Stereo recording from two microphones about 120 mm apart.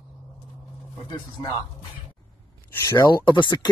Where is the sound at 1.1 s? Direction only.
35° left (ahead or behind).